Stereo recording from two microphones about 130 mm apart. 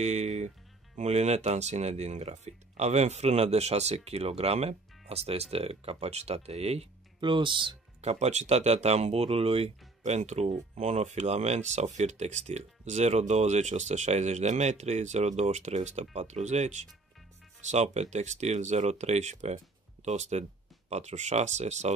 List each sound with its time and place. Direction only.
0.0 s music: 60° right (ahead or behind)
0.9 s speech: 60° right (ahead or behind)
7.2 s speech: 40° right (ahead or behind)
8.0 s speech: 55° right (ahead or behind)